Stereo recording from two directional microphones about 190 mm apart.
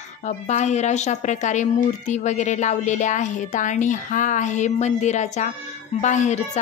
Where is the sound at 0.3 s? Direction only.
40° left (ahead or behind).